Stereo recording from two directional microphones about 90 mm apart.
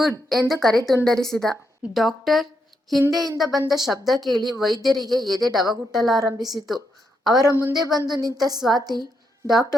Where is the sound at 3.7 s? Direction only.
Centre (ahead or behind).